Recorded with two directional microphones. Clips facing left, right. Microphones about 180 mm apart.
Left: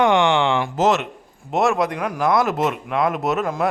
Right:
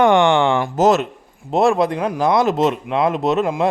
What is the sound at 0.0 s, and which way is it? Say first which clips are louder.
Speech: right 3 dB; 50° right (ahead or behind).